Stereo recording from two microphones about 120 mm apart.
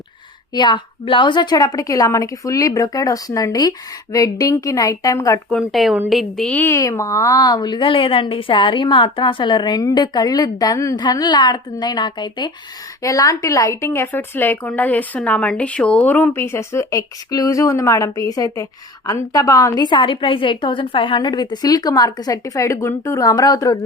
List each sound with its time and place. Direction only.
0.5 s a woman's voice: 40° left (ahead or behind)
5.5 s speech: centre (ahead or behind)
6.6 s a woman's voice: 25° left (ahead or behind)
13.0 s a woman's voice: 30° left (ahead or behind)